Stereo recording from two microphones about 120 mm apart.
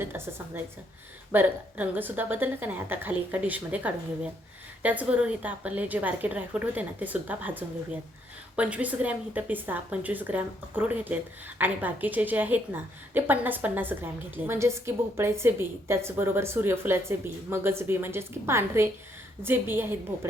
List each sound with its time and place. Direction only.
0.0 s a woman's voice: 20° right (ahead or behind)